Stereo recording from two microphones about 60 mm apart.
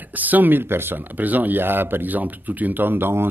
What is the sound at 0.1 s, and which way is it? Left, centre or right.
Speech, right.